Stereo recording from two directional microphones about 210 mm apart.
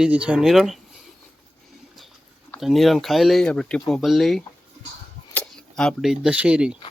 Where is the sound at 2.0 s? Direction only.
Centre (ahead or behind).